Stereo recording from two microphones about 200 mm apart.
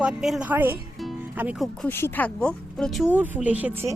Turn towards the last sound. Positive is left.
turn(degrees=-10)  # may be behind; listen again after turning